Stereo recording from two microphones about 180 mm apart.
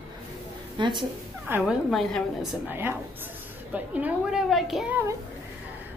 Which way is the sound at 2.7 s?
10° right (ahead or behind).